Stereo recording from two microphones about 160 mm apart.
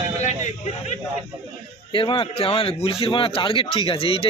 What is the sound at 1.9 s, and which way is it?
A man's voice, 30° left (ahead or behind).